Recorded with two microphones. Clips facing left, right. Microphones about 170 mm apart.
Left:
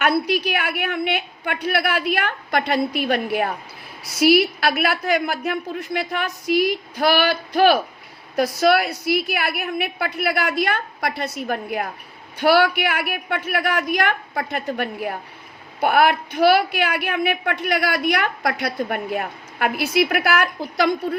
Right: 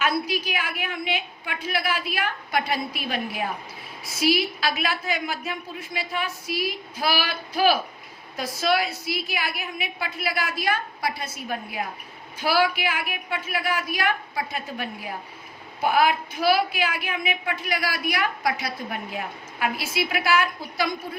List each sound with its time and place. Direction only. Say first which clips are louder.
0.0 s a woman's voice: left 6 dB; 65° left (ahead or behind)
4.0 s a woman's voice: left 7 dB; centre (ahead or behind)
4.3 s a woman's voice: left 7 dB; 65° left (ahead or behind)